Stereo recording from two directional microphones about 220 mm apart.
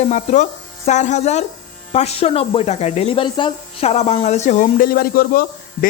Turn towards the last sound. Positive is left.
turn(degrees=45)  # may be behind; listen again after turning